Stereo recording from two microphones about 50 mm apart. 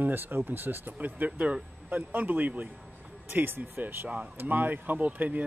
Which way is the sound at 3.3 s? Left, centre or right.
Right.